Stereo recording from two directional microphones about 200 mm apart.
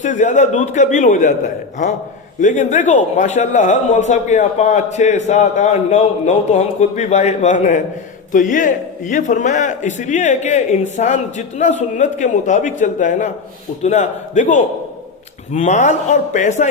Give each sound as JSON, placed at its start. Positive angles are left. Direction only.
{"t": 0.0, "sound": "a man's voice", "side_deg": 40}
{"t": 2.4, "sound": "a man's voice", "side_deg": 40}